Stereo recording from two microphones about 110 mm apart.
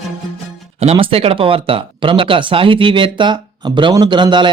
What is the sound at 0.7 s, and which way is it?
Speech, 65° right (ahead or behind).